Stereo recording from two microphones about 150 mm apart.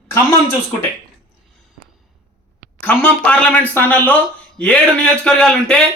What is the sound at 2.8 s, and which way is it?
Speech, 10° left (ahead or behind).